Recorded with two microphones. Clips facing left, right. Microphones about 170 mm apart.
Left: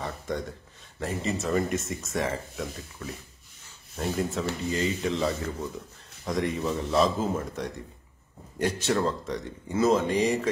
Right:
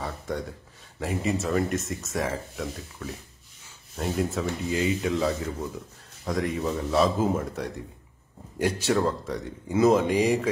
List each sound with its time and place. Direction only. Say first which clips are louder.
0.0 s speech: even; 5° right (ahead or behind)